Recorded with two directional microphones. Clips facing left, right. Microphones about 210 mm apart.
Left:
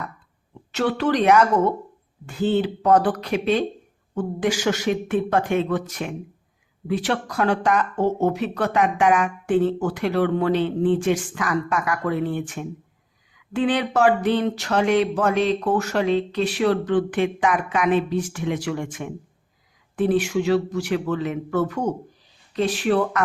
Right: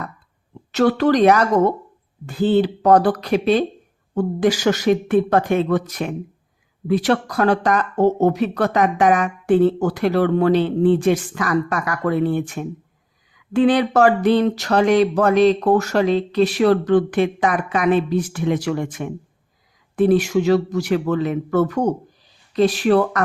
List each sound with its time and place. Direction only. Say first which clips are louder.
0.7 s speech: right 6 dB; 40° right (ahead or behind)